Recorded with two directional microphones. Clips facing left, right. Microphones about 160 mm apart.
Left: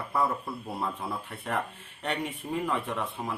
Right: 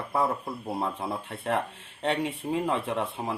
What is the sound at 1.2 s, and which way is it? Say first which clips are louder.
Speech: right 5 dB; 30° right (ahead or behind).